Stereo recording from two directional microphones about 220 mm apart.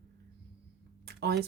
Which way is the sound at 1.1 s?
45° right (ahead or behind).